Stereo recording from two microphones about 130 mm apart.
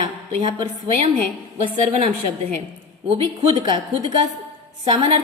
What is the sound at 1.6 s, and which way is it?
Speech, 65° right (ahead or behind).